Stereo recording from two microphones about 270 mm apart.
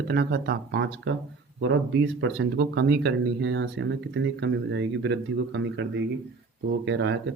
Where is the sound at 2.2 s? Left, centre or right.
Right.